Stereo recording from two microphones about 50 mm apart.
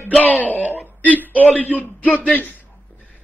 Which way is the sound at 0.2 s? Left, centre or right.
Left.